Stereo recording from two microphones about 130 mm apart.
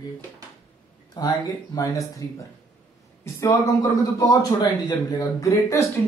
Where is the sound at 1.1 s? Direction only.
30° left (ahead or behind).